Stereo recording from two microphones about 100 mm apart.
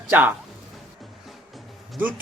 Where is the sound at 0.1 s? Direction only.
15° right (ahead or behind).